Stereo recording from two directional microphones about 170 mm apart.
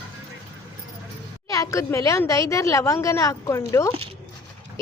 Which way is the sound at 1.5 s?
20° left (ahead or behind).